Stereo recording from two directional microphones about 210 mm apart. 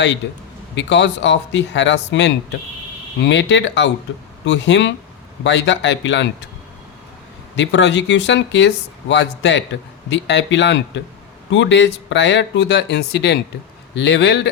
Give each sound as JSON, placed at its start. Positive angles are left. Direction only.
{"t": 0.8, "sound": "speech", "side_deg": 60}
{"t": 7.5, "sound": "speech", "side_deg": 60}